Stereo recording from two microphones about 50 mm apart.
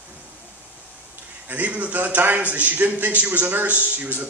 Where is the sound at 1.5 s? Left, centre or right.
Right.